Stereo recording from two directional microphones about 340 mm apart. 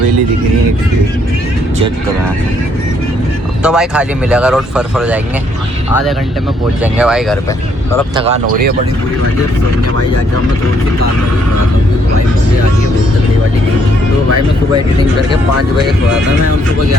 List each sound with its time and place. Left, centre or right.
3.6 s speech: centre
6.8 s speech: centre
8.1 s speech: centre